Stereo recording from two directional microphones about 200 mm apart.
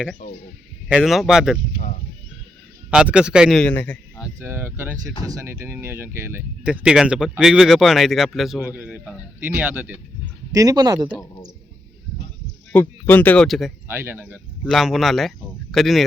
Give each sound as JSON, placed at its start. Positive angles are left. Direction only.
{"t": 0.9, "sound": "speech", "side_deg": 0}
{"t": 2.9, "sound": "speech", "side_deg": -5}
{"t": 4.4, "sound": "speech", "side_deg": -10}
{"t": 10.5, "sound": "speech", "side_deg": -20}
{"t": 12.7, "sound": "speech", "side_deg": 10}
{"t": 13.8, "sound": "speech", "side_deg": -10}
{"t": 14.6, "sound": "speech", "side_deg": 0}